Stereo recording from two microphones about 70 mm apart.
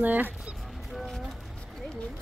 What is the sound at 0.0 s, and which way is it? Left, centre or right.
Speech, right.